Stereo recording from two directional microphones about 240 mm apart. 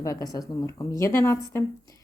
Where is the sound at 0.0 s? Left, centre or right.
Centre.